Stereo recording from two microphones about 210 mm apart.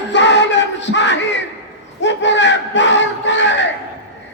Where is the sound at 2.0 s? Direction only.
60° left (ahead or behind).